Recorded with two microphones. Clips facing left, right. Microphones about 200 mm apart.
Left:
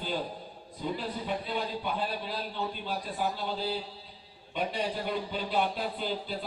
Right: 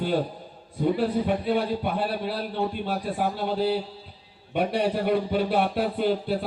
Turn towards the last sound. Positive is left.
turn(degrees=-60)  # may be behind; listen again after turning